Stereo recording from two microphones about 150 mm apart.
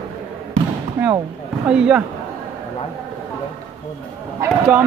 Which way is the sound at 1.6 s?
5° right (ahead or behind).